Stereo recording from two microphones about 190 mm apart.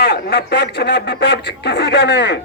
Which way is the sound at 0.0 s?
60° left (ahead or behind).